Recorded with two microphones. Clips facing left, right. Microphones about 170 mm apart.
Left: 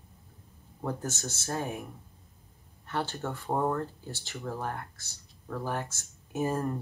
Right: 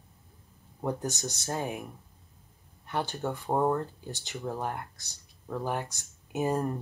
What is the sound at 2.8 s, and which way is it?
Speech, 15° right (ahead or behind).